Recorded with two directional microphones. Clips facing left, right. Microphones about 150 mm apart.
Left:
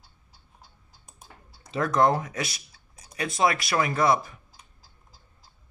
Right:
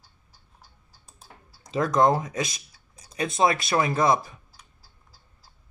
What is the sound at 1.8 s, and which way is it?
Speech, 20° right (ahead or behind).